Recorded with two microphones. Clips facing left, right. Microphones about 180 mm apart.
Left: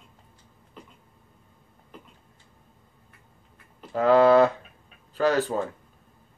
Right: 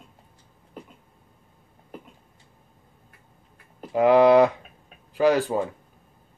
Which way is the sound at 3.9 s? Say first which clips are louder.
Right 2 dB; 15° right (ahead or behind).